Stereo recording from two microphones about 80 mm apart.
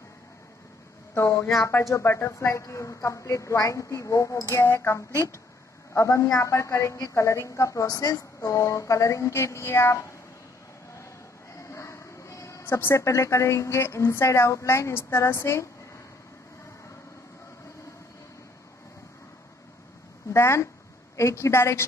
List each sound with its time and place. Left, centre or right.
1.1 s a woman's voice: left
11.5 s a sound: left
12.6 s a woman's voice: left
20.3 s a woman's voice: left